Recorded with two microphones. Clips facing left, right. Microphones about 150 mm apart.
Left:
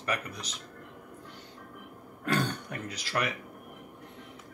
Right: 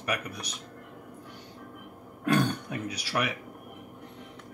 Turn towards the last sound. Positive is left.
turn(degrees=-10)  # may be behind; listen again after turning